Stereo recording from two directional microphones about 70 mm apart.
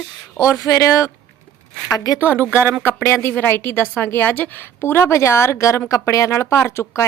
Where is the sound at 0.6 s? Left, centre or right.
Left.